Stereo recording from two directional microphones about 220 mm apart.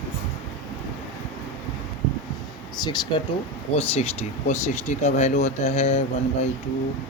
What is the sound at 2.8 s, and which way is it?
Speech, 20° left (ahead or behind).